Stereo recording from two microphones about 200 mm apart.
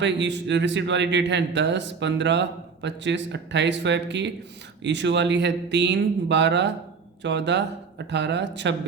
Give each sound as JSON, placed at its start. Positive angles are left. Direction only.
{"t": 0.0, "sound": "speech", "side_deg": -65}